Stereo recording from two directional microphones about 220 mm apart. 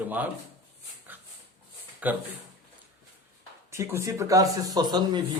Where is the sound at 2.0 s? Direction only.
5° right (ahead or behind).